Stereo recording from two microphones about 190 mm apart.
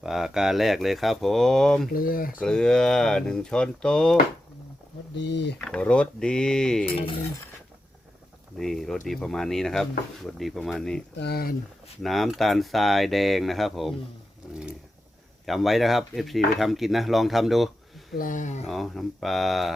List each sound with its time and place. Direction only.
0.0 s dishes: centre (ahead or behind)
1.9 s speech: 50° left (ahead or behind)
2.4 s dishes: 5° left (ahead or behind)
5.1 s speech: 65° left (ahead or behind)
5.5 s dishes: 5° left (ahead or behind)
8.5 s dishes: centre (ahead or behind)
11.2 s speech: 55° left (ahead or behind)
12.0 s dishes: centre (ahead or behind)
15.4 s dishes: centre (ahead or behind)
18.2 s speech: 45° left (ahead or behind)
18.6 s dishes: centre (ahead or behind)